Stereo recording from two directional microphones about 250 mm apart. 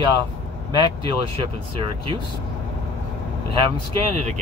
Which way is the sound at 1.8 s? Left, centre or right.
Right.